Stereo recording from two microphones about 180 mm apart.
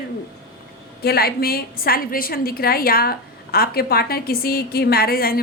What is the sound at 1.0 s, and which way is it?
A woman's voice, 60° left (ahead or behind).